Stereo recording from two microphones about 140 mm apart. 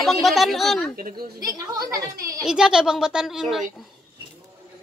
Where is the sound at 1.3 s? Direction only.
25° right (ahead or behind).